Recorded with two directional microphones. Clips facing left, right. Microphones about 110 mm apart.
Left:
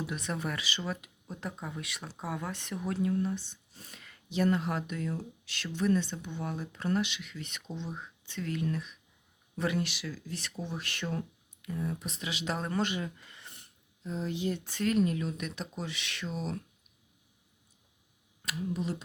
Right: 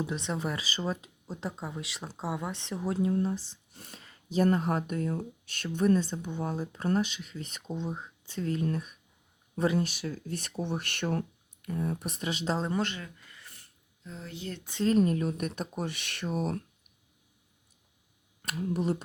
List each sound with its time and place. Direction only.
0.0 s speech: 25° right (ahead or behind)
3.4 s speech: 60° right (ahead or behind)
3.9 s speech: 30° right (ahead or behind)
10.1 s speech: 55° right (ahead or behind)
10.6 s speech: 65° right (ahead or behind); by 12.5 s 40° right (ahead or behind)
13.0 s a sound: 20° left (ahead or behind)
14.6 s speech: 20° right (ahead or behind)
14.8 s speech: 40° right (ahead or behind)
18.4 s speech: 55° right (ahead or behind)